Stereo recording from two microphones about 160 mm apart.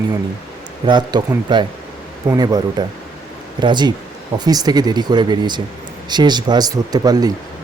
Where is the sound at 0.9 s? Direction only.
30° right (ahead or behind).